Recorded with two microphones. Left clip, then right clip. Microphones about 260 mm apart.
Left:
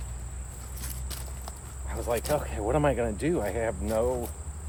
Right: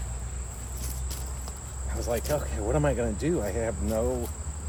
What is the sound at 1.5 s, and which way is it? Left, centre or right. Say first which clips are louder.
Cricket: right 1 dB; centre.